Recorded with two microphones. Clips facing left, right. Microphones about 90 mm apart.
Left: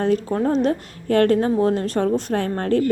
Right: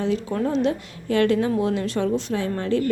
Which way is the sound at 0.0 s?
50° left (ahead or behind).